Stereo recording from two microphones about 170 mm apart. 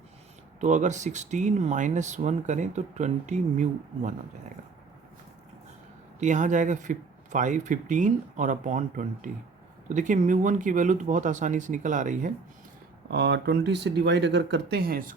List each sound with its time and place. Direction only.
0.6 s speech: 45° right (ahead or behind)
6.1 s speech: 45° right (ahead or behind)
13.1 s speech: 85° right; by 15.1 s 60° right (ahead or behind)